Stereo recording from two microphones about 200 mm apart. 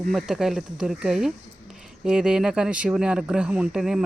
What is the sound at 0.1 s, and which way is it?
Speech, centre (ahead or behind).